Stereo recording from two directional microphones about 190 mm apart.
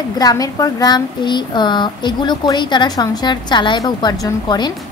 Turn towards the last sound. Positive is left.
turn(degrees=20)  # may be behind; listen again after turning